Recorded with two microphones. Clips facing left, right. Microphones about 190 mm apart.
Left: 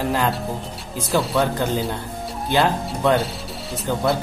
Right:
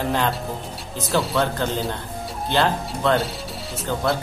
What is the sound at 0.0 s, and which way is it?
Speech, 5° left (ahead or behind).